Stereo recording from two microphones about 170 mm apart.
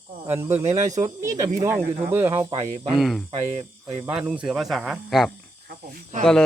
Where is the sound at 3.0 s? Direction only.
Centre (ahead or behind).